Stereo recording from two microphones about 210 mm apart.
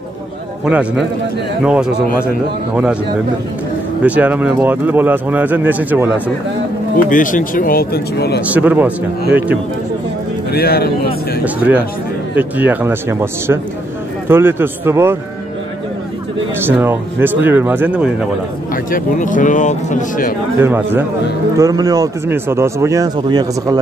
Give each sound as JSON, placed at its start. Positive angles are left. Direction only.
{"t": 0.7, "sound": "a man's voice", "side_deg": -5}
{"t": 4.0, "sound": "speech", "side_deg": -5}
{"t": 7.1, "sound": "speech", "side_deg": 40}
{"t": 8.5, "sound": "speech", "side_deg": -10}
{"t": 10.5, "sound": "speech", "side_deg": 50}
{"t": 11.4, "sound": "speech", "side_deg": -5}
{"t": 16.6, "sound": "speech", "side_deg": -10}
{"t": 18.9, "sound": "speech", "side_deg": 40}
{"t": 20.5, "sound": "speech", "side_deg": -10}